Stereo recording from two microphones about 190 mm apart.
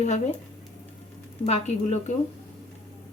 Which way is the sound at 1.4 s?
35° left (ahead or behind).